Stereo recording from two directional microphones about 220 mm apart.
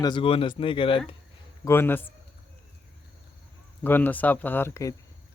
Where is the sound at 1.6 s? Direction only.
10° left (ahead or behind).